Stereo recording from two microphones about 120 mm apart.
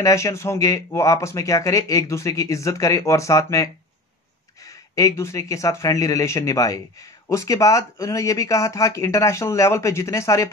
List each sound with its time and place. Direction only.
0.0 s speech: 25° left (ahead or behind)